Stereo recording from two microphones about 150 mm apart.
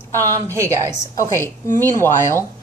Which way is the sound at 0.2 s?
20° right (ahead or behind).